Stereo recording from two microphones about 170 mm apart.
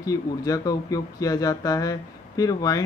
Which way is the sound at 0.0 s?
20° left (ahead or behind).